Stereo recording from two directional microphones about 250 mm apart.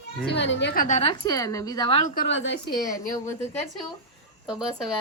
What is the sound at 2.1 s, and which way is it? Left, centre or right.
Speech, left.